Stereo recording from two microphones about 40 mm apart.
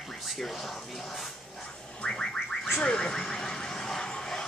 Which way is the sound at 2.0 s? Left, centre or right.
Left.